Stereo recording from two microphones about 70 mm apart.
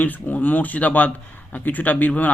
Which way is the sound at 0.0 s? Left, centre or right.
Left.